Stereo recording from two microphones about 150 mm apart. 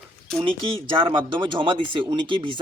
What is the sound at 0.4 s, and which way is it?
Speech, 35° right (ahead or behind).